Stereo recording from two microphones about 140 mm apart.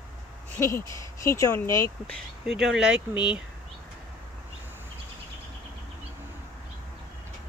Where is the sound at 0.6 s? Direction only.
20° left (ahead or behind).